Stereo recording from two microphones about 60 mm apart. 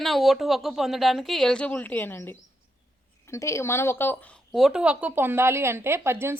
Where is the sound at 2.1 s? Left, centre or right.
Left.